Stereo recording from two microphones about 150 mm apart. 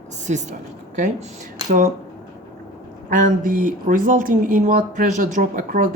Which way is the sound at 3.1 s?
60° right (ahead or behind).